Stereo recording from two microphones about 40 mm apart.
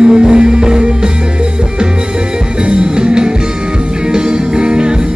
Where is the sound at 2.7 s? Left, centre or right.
Right.